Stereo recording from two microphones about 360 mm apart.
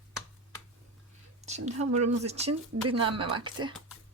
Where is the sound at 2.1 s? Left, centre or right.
Centre.